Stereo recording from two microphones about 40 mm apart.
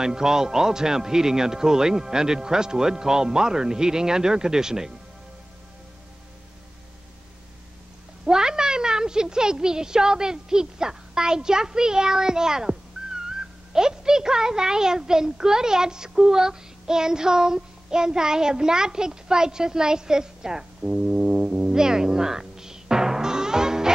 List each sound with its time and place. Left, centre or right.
0.0 s a man's voice: centre
8.3 s speech: centre